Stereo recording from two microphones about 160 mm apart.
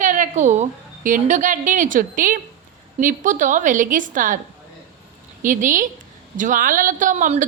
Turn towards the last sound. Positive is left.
turn(degrees=-50)  # may be behind; listen again after turning